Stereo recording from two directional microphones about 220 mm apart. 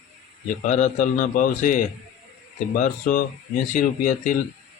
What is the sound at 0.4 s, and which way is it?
Speech, 35° left (ahead or behind).